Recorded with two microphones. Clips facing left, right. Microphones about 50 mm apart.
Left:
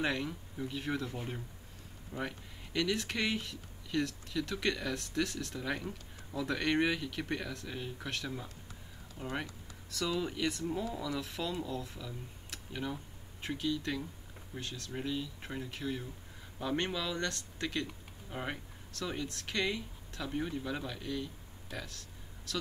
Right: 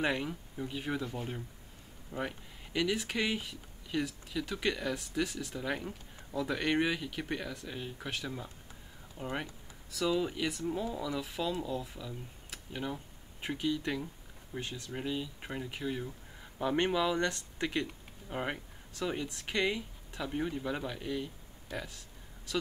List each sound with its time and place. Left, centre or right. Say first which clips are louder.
0.0 s speech: right 2 dB; centre
2.1 s speech: right 2 dB; centre